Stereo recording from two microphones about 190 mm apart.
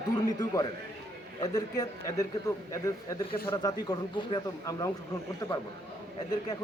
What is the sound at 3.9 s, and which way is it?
A man's voice, 25° left (ahead or behind).